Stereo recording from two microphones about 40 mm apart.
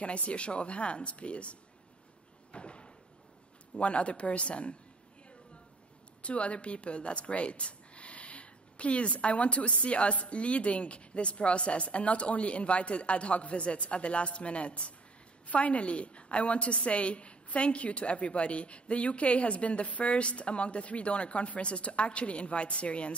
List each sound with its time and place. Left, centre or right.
0.0 s a woman's voice: left
2.5 s door: left
3.7 s speech: left
6.2 s a woman's voice: left